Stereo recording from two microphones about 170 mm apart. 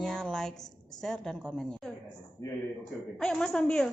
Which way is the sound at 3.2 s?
5° left (ahead or behind).